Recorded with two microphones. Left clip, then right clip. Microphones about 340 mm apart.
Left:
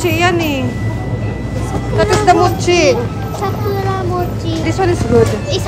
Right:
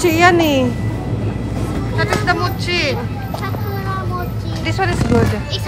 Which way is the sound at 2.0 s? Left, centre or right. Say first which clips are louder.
Left 7 dB; centre.